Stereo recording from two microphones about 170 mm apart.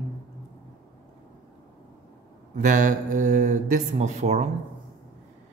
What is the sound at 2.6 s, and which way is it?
A man's voice, 45° right (ahead or behind).